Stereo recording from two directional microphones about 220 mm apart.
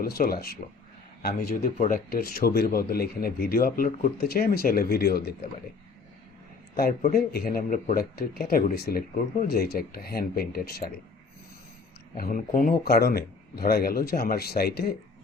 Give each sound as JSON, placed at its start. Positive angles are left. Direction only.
{"t": 0.0, "sound": "speech", "side_deg": 45}
{"t": 1.4, "sound": "speech", "side_deg": 35}
{"t": 6.7, "sound": "speech", "side_deg": 45}
{"t": 12.1, "sound": "speech", "side_deg": 40}